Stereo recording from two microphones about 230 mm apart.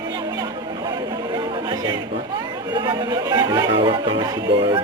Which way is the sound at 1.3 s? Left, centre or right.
Centre.